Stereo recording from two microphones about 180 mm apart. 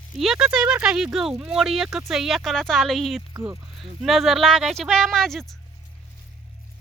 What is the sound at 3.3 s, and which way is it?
Speech, 15° right (ahead or behind).